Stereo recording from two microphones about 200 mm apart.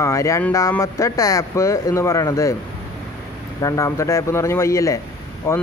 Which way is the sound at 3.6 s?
15° left (ahead or behind).